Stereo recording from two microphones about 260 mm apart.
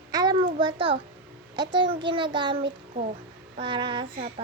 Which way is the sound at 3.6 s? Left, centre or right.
Centre.